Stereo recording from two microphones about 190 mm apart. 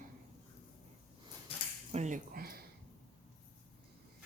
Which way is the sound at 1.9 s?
40° right (ahead or behind).